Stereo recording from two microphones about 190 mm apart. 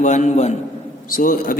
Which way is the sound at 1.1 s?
45° left (ahead or behind).